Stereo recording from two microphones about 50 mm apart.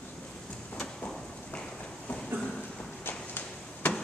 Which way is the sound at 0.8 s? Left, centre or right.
Centre.